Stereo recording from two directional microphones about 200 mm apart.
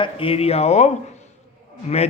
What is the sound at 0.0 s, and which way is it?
Speech, 25° left (ahead or behind).